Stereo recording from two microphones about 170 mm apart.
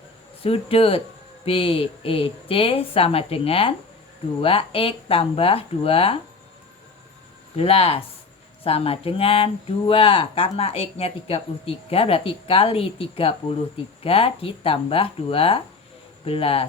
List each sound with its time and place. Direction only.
0.4 s speech: 35° left (ahead or behind)
7.5 s speech: 35° left (ahead or behind)